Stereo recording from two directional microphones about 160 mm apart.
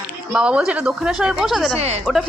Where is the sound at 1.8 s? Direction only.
45° right (ahead or behind).